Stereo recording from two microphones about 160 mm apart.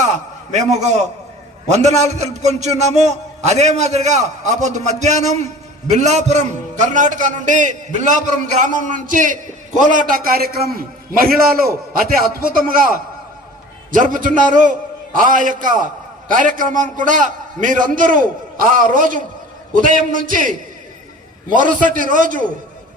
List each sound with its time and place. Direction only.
0.5 s a man's voice: 45° right (ahead or behind)